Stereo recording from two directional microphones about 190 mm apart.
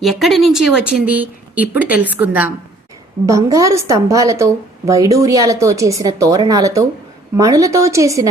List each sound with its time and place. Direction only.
0.0 s a woman's voice: centre (ahead or behind); by 8.3 s 15° right (ahead or behind)